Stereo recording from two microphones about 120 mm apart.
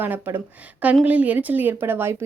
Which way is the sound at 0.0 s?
15° right (ahead or behind).